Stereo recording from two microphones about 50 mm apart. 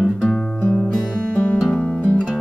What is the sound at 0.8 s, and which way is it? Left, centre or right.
Music, centre.